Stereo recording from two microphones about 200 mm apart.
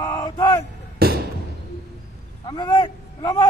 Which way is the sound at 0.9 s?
50° right (ahead or behind).